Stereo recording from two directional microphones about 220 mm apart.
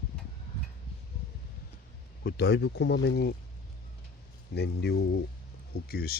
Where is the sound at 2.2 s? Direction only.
45° left (ahead or behind).